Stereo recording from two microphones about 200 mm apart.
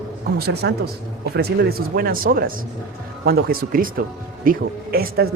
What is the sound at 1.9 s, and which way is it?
A man's voice, 45° right (ahead or behind).